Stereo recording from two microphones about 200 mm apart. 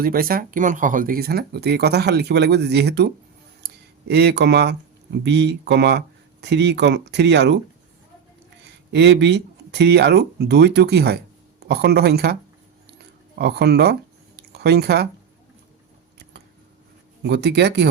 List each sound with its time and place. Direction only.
0.0 s speech: 50° right (ahead or behind)
4.1 s speech: 55° right (ahead or behind)
8.9 s speech: 60° right (ahead or behind)
13.4 s speech: 55° right (ahead or behind)
14.3 s a sound: 55° right (ahead or behind)
17.2 s speech: 60° right (ahead or behind)